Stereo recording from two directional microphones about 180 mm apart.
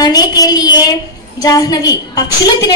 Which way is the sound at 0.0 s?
20° left (ahead or behind).